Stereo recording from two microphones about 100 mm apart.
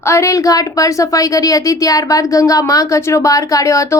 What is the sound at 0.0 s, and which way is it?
A woman's voice, 30° left (ahead or behind).